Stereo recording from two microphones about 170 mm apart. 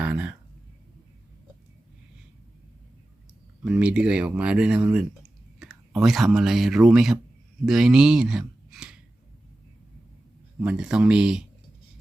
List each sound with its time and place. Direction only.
0.0 s speech: 10° right (ahead or behind)
3.6 s speech: 5° right (ahead or behind)
10.6 s speech: 5° right (ahead or behind)